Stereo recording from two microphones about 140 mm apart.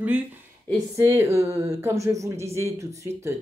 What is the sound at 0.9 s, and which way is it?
Speech, 20° right (ahead or behind).